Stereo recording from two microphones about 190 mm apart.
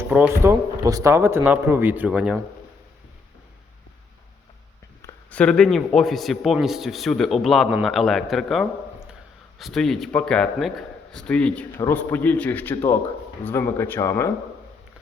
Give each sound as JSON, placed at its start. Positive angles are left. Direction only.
{"t": 0.0, "sound": "speech", "side_deg": -10}
{"t": 5.0, "sound": "a man's voice", "side_deg": 5}